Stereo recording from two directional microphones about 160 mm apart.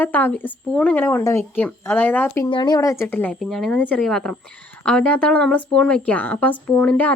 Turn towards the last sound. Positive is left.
turn(degrees=10)  # may be behind; listen again after turning